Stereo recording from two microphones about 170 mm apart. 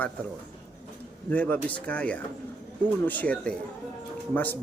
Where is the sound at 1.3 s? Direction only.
10° left (ahead or behind).